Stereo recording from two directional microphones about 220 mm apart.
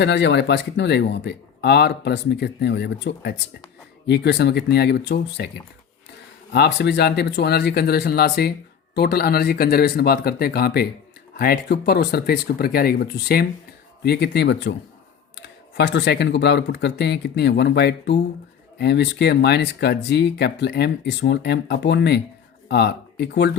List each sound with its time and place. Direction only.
0.0 s speech: 50° left (ahead or behind)
6.5 s speech: 50° left (ahead or behind)